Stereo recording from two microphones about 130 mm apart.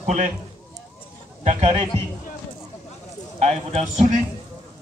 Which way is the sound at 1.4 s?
55° right (ahead or behind).